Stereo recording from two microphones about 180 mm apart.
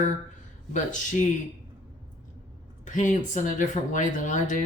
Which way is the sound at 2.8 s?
45° left (ahead or behind).